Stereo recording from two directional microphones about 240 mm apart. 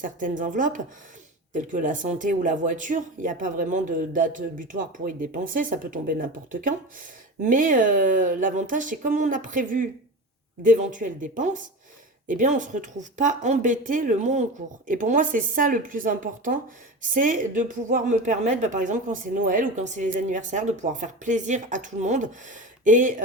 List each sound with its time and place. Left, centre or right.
0.0 s speech: right